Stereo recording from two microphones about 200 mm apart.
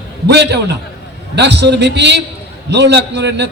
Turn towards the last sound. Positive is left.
turn(degrees=-60)  # may be behind; listen again after turning